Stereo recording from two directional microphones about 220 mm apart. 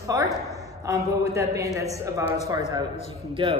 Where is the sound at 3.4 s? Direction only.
25° right (ahead or behind).